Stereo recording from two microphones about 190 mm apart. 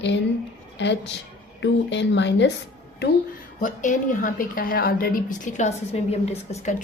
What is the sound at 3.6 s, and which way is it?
A woman's voice, 40° left (ahead or behind).